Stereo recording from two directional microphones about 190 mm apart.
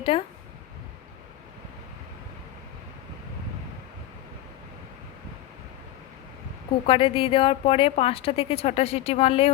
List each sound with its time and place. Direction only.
0.1 s a woman's voice: 30° left (ahead or behind)
6.8 s a woman's voice: 30° left (ahead or behind)